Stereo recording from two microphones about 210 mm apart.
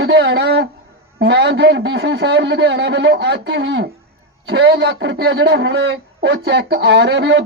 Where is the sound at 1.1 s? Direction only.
50° right (ahead or behind).